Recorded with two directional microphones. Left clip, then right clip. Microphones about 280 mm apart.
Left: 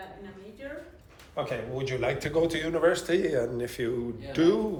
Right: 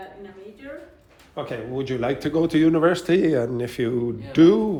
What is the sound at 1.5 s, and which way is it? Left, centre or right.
Speech, centre.